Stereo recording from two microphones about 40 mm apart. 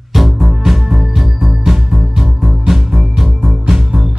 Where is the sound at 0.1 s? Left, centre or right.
Centre.